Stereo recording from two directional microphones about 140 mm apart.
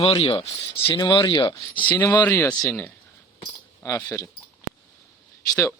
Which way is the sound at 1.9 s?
20° left (ahead or behind).